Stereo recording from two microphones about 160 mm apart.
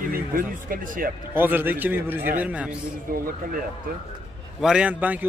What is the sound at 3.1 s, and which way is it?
Speech, 65° right (ahead or behind).